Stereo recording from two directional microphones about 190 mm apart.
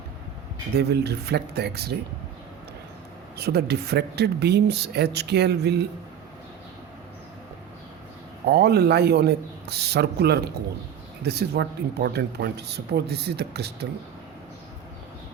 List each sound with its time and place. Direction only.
0.8 s speech: 60° right (ahead or behind)
3.3 s speech: 60° right (ahead or behind)
8.4 s speech: 60° right (ahead or behind)